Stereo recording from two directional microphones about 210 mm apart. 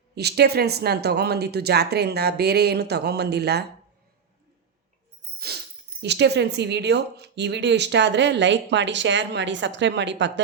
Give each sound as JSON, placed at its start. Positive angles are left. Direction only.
{"t": 0.2, "sound": "speech", "side_deg": -50}
{"t": 6.0, "sound": "speech", "side_deg": -55}